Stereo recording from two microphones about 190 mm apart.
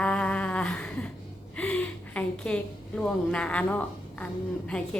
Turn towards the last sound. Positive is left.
turn(degrees=5)  # may be behind; listen again after turning